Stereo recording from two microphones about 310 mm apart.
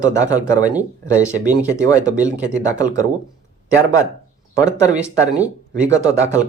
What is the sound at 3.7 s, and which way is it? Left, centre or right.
Speech, centre.